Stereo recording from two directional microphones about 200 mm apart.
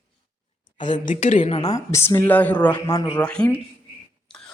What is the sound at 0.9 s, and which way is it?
Speech, 40° left (ahead or behind).